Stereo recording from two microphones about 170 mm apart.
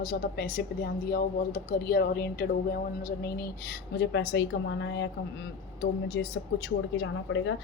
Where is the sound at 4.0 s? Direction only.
90° left.